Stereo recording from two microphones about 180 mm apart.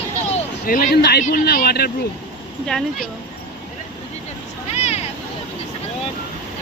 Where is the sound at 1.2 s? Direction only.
55° left (ahead or behind).